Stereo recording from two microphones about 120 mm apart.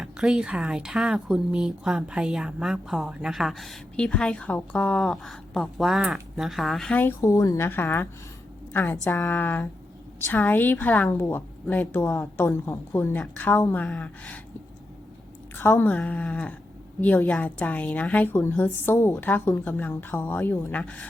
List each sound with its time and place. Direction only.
0.0 s speech: 5° right (ahead or behind)
6.9 s a woman's voice: 15° left (ahead or behind)
7.2 s a woman's voice: 25° left (ahead or behind); by 14.4 s 10° left (ahead or behind)
15.5 s a woman's voice: 20° left (ahead or behind)